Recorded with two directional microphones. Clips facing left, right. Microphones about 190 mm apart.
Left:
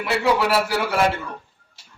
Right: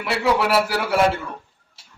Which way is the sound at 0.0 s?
Centre (ahead or behind).